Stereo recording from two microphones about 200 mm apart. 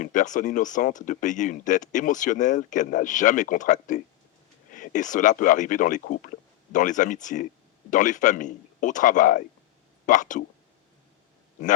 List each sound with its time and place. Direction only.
0.0 s speech: 40° left (ahead or behind)